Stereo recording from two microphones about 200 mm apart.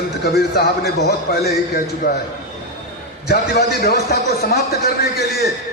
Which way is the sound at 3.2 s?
50° left (ahead or behind).